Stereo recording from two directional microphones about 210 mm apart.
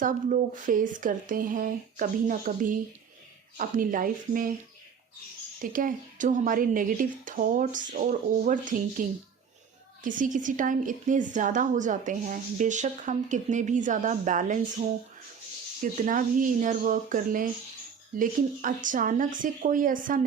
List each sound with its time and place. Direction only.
0.0 s a woman's voice: 35° right (ahead or behind)
5.7 s a woman's voice: 40° right (ahead or behind)
15.8 s a woman's voice: 40° right (ahead or behind)